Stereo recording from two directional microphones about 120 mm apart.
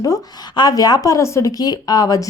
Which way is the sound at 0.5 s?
35° left (ahead or behind).